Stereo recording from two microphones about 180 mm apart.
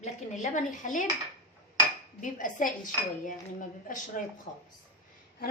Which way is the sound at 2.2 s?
45° left (ahead or behind).